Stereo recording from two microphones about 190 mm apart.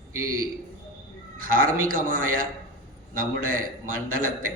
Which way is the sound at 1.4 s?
45° right (ahead or behind).